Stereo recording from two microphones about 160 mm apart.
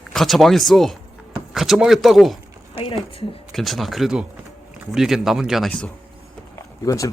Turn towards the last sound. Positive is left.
turn(degrees=20)  # may be behind; listen again after turning